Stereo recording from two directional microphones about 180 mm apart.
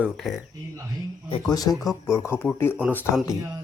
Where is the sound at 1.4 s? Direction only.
20° left (ahead or behind).